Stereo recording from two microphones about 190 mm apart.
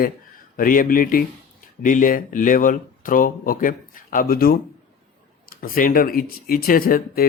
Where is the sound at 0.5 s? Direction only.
45° left (ahead or behind).